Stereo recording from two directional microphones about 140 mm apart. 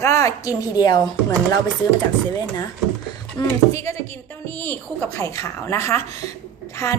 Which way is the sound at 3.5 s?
20° left (ahead or behind).